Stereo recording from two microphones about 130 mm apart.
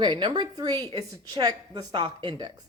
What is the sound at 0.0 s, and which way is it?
Speech, 35° right (ahead or behind).